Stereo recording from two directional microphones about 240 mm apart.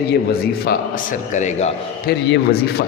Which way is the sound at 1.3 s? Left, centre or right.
Left.